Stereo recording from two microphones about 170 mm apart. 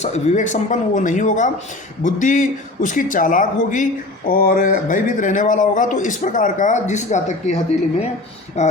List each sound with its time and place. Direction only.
0.0 s speech: 45° left (ahead or behind)